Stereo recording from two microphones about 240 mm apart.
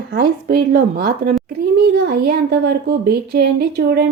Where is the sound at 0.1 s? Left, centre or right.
Right.